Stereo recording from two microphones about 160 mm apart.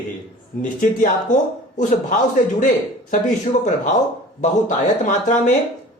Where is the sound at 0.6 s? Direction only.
55° left (ahead or behind).